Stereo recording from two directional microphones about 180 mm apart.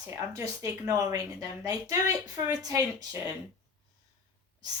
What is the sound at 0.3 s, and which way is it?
A woman's voice, 20° right (ahead or behind).